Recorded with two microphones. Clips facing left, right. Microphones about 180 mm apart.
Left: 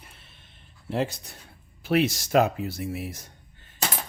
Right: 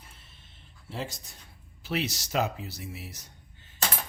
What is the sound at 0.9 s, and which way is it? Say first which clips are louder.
Speech: left 9 dB; 65° left (ahead or behind).